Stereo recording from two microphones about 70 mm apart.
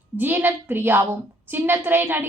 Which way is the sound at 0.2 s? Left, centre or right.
Right.